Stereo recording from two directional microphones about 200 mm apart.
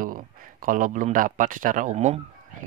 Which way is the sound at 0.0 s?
45° right (ahead or behind).